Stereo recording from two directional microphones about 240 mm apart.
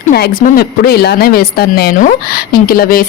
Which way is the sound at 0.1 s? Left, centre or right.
Left.